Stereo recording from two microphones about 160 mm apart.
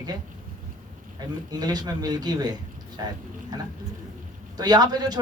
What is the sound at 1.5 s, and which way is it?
Speech, 25° right (ahead or behind).